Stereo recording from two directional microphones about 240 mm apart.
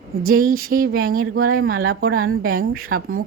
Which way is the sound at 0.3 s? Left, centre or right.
Right.